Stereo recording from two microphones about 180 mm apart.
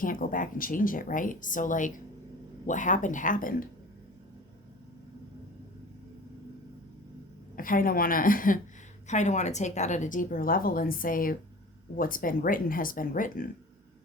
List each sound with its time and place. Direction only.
0.0 s a woman's voice: 50° left (ahead or behind)
7.5 s a woman's voice: 50° left (ahead or behind)